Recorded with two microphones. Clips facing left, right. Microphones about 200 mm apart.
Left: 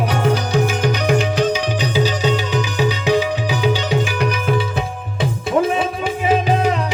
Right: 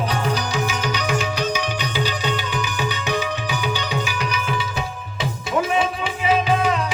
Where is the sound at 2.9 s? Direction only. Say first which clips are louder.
Left 7 dB; 90° left.